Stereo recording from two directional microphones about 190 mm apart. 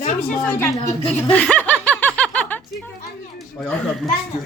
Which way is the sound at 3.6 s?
5° left (ahead or behind).